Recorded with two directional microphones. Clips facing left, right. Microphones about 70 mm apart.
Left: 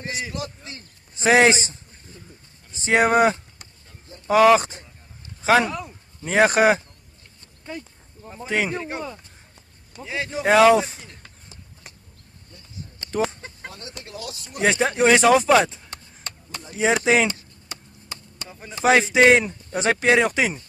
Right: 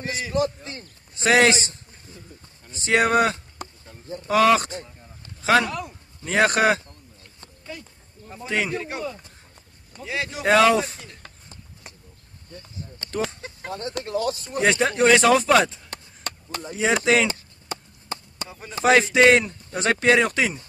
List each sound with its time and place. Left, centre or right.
0.1 s speech: centre
1.1 s a man's voice: left
4.4 s speech: centre
6.2 s speech: centre
8.5 s speech: centre
9.9 s a man's voice: centre
13.0 s a sound: centre
14.6 s speech: centre
16.7 s speech: centre
17.3 s a sound: right
18.7 s speech: centre